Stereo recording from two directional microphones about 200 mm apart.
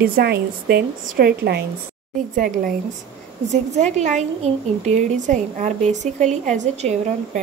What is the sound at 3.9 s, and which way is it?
A woman's voice, 35° right (ahead or behind).